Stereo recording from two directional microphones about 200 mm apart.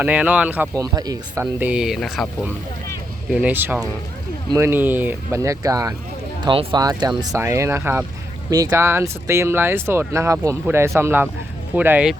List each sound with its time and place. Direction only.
0.0 s speech: 5° right (ahead or behind)